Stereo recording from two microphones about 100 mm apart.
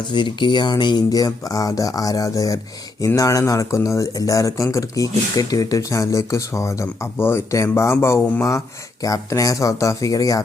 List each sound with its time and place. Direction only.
0.1 s speech: 50° left (ahead or behind)